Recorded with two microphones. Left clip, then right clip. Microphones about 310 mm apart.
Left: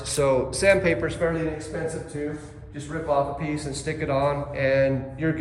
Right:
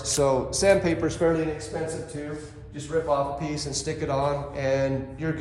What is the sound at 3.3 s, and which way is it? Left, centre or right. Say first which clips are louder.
Speech: even; centre.